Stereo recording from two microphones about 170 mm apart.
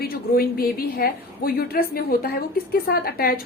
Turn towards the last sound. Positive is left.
turn(degrees=60)  # may be behind; listen again after turning